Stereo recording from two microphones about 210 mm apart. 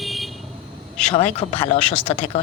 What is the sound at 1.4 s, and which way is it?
Speech, 30° left (ahead or behind).